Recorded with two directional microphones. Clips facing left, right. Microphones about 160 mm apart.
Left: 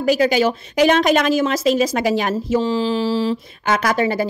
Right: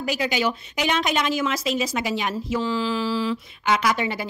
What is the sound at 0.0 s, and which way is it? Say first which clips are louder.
A woman's voice: left 8 dB; 40° left (ahead or behind).